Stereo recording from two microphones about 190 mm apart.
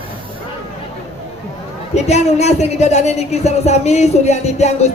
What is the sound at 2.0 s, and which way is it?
Speech, 35° left (ahead or behind).